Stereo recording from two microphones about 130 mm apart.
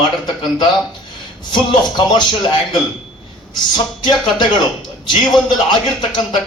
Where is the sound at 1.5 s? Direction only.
35° left (ahead or behind).